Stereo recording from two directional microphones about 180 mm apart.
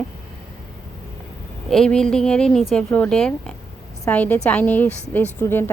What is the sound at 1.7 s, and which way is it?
A woman's voice, 5° left (ahead or behind).